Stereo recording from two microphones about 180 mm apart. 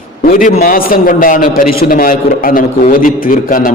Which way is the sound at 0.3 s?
50° left (ahead or behind).